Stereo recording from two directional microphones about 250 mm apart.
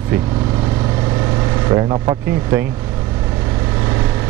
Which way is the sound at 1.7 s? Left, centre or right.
Centre.